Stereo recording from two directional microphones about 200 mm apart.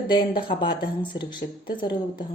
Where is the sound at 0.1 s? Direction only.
25° left (ahead or behind).